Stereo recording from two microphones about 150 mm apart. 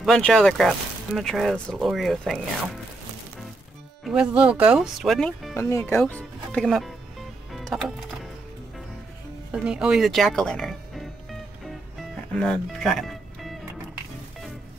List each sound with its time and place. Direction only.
0.0 s speech: 5° left (ahead or behind)
4.0 s speech: 5° right (ahead or behind)
5.6 s speech: 20° left (ahead or behind)
5.9 s speech: 10° left (ahead or behind)
7.5 s music: centre (ahead or behind)
9.5 s speech: 5° right (ahead or behind)
12.4 s speech: 5° left (ahead or behind)